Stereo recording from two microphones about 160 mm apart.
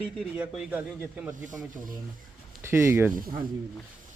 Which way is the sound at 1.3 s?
55° right (ahead or behind).